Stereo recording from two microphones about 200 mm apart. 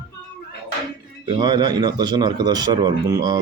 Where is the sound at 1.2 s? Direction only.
20° right (ahead or behind).